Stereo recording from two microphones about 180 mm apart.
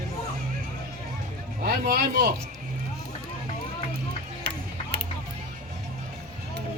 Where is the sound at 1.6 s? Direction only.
55° right (ahead or behind).